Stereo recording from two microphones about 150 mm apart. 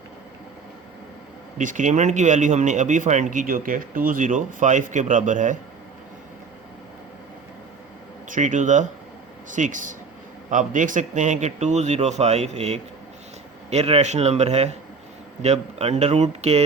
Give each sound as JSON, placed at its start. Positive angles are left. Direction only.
{"t": 1.5, "sound": "speech", "side_deg": -55}
{"t": 8.3, "sound": "a man's voice", "side_deg": -55}